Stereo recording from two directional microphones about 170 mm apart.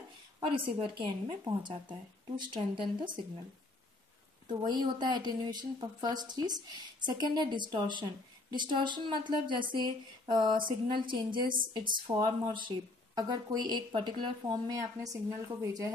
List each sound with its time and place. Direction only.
0.4 s a woman's voice: 30° right (ahead or behind)
4.5 s a woman's voice: 25° right (ahead or behind)
11.4 s a woman's voice: 55° right (ahead or behind)
12.1 s a woman's voice: 25° right (ahead or behind)